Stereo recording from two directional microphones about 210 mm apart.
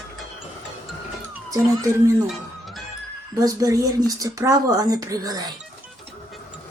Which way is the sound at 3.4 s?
15° right (ahead or behind).